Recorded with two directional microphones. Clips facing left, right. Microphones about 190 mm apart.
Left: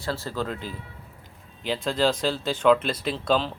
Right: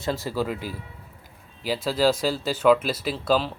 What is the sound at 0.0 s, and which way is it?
Speech, 15° right (ahead or behind).